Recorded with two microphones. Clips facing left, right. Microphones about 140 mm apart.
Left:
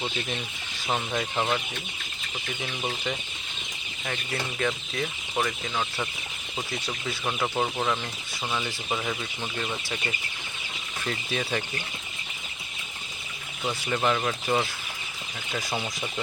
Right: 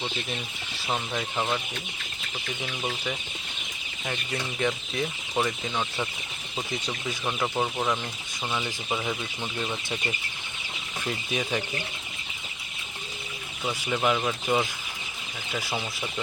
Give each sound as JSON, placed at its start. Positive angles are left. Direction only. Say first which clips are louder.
{"t": 0.9, "sound": "speech", "louder": "left 2 dB", "side_deg": 5}
{"t": 4.0, "sound": "speech", "louder": "even", "side_deg": -15}
{"t": 6.7, "sound": "speech", "louder": "right 1 dB", "side_deg": -15}
{"t": 7.3, "sound": "speech", "louder": "even", "side_deg": 0}
{"t": 11.0, "sound": "speech", "louder": "even", "side_deg": -10}
{"t": 13.8, "sound": "speech", "louder": "even", "side_deg": -5}